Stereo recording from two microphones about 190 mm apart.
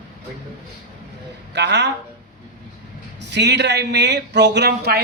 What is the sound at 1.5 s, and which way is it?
Speech, 65° right (ahead or behind).